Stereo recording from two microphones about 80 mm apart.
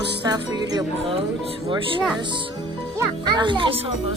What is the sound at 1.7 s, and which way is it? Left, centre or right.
Speech, right.